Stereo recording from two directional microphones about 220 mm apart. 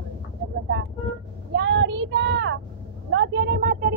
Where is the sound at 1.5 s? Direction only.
55° right (ahead or behind).